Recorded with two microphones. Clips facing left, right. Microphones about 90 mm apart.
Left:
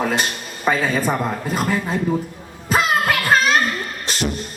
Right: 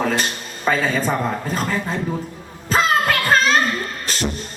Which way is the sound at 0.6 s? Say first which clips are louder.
Even; 10° left (ahead or behind).